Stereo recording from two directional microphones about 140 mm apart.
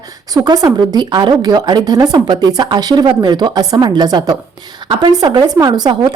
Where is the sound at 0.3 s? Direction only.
30° right (ahead or behind).